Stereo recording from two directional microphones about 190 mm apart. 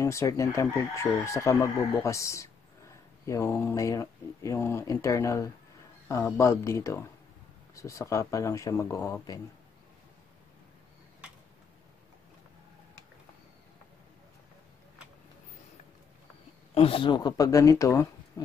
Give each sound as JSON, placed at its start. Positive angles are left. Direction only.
{"t": 0.0, "sound": "speech", "side_deg": 15}
{"t": 16.7, "sound": "speech", "side_deg": 30}